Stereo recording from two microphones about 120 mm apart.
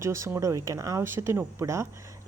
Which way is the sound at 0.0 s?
25° right (ahead or behind).